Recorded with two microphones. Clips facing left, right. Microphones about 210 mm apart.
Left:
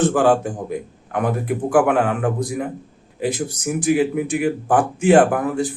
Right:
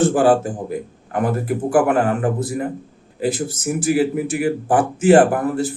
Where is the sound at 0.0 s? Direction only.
5° right (ahead or behind).